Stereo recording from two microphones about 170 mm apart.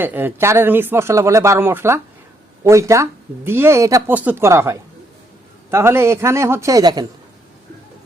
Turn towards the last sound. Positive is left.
turn(degrees=-20)  # may be behind; listen again after turning